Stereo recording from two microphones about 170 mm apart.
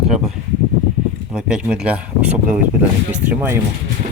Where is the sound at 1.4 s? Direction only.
5° right (ahead or behind).